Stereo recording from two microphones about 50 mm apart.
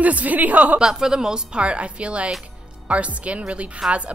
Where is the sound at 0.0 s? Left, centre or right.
Right.